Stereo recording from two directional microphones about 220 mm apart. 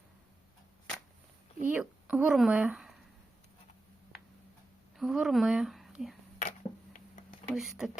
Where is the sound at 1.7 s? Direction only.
5° right (ahead or behind).